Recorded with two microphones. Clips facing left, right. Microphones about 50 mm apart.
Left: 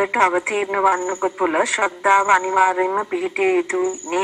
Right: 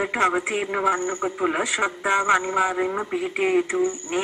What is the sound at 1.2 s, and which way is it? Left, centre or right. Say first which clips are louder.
Speech: left 5 dB; left.